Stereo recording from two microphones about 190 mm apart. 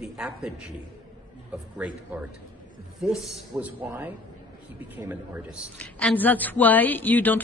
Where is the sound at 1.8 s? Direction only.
10° right (ahead or behind).